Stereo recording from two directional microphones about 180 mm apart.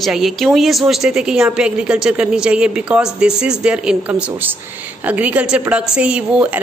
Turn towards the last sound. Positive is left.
turn(degrees=-5)  # may be behind; listen again after turning